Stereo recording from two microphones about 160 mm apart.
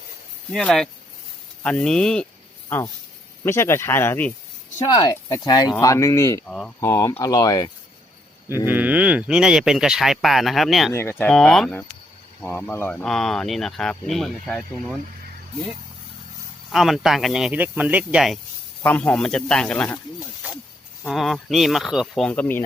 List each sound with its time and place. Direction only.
0.5 s speech: centre (ahead or behind)
4.9 s speech: 25° left (ahead or behind)
6.5 s speech: 5° left (ahead or behind)
6.7 s speech: 20° left (ahead or behind)
8.4 s speech: 15° right (ahead or behind)
10.9 s speech: 15° left (ahead or behind)
11.3 s speech: 5° left (ahead or behind)
16.7 s speech: centre (ahead or behind)
18.8 s speech: 10° left (ahead or behind)
20.1 s snake: 5° right (ahead or behind)
21.0 s speech: centre (ahead or behind)